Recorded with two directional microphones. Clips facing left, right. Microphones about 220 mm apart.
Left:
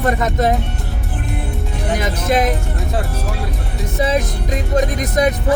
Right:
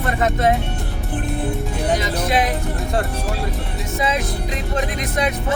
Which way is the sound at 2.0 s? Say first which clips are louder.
Left 2 dB; 45° left (ahead or behind).